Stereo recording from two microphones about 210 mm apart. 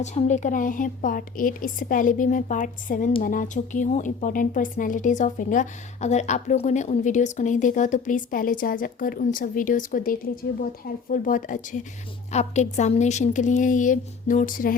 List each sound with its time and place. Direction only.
0.0 s speech: 35° left (ahead or behind)